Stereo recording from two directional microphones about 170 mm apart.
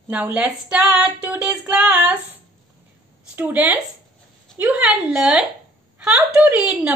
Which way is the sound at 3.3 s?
10° right (ahead or behind).